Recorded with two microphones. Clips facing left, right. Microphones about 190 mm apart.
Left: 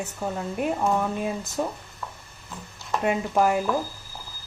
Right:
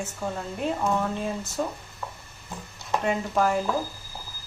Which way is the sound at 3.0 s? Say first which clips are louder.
Left 3 dB; 10° left (ahead or behind).